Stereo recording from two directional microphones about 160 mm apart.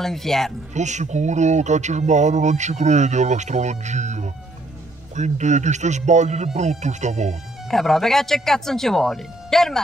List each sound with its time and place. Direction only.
0.0 s speech: centre (ahead or behind)
0.7 s speech: 45° right (ahead or behind)
7.7 s speech: centre (ahead or behind)